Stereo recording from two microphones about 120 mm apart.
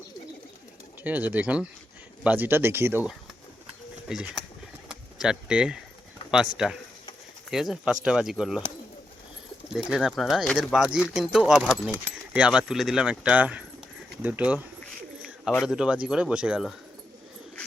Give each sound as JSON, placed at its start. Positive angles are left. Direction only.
{"t": 1.0, "sound": "speech", "side_deg": -15}
{"t": 4.1, "sound": "speech", "side_deg": -5}
{"t": 9.7, "sound": "speech", "side_deg": -5}
{"t": 15.6, "sound": "speech", "side_deg": -5}